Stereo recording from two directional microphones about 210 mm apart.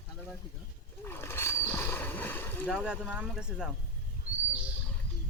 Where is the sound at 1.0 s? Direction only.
10° left (ahead or behind).